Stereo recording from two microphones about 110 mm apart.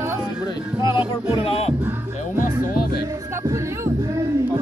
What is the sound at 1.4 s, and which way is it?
Speech, 60° left (ahead or behind).